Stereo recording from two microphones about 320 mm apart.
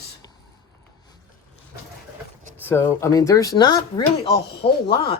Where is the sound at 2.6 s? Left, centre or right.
Centre.